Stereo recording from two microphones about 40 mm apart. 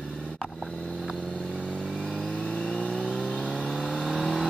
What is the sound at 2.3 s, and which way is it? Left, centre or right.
Vehicle, left.